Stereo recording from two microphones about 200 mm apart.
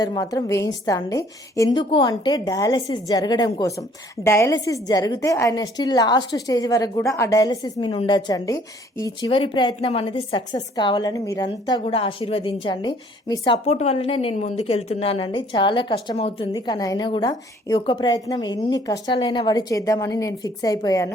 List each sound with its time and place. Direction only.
0.0 s a woman's voice: 20° left (ahead or behind)